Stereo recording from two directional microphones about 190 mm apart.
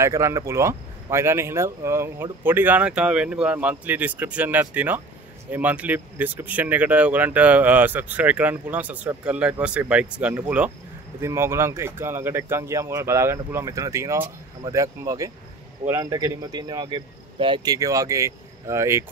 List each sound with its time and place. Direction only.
0.0 s speech: 15° right (ahead or behind)